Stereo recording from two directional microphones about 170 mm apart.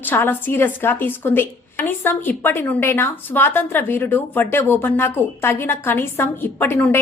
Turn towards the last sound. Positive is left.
turn(degrees=10)  # may be behind; listen again after turning